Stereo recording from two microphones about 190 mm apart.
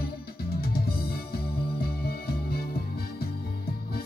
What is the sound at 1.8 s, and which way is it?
Music, 55° left (ahead or behind).